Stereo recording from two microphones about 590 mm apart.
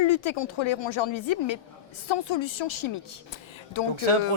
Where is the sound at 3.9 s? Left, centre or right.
Right.